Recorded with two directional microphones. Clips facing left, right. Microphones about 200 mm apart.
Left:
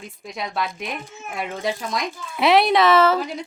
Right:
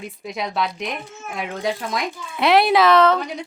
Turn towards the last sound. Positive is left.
turn(degrees=5)  # may be behind; listen again after turning